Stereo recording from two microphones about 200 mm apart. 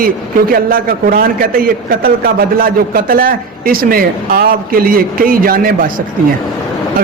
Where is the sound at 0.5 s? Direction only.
45° right (ahead or behind).